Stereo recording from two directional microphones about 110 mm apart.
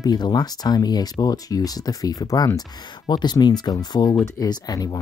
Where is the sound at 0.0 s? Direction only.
40° left (ahead or behind).